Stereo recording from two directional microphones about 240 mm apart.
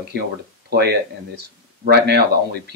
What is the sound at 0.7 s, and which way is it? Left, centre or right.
Speech, right.